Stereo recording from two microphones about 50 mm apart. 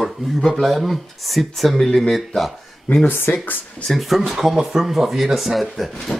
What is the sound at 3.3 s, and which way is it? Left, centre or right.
Speech, left.